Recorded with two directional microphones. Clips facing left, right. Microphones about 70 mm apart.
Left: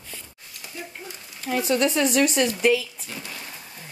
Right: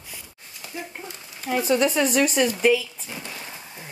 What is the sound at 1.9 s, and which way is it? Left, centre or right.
Speech, centre.